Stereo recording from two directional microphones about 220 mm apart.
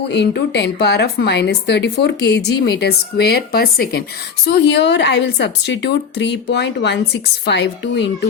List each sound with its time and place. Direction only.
0.1 s a woman's voice: 50° left (ahead or behind)